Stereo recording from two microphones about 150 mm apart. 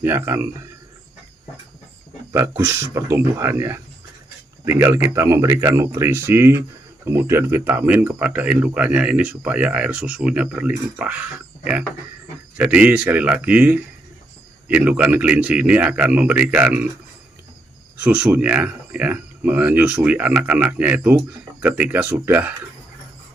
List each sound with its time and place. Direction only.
0.0 s speech: 15° right (ahead or behind)
2.3 s speech: 15° right (ahead or behind)
18.0 s speech: 5° right (ahead or behind)